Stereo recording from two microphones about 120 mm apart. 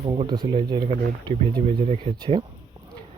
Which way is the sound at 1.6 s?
85° right.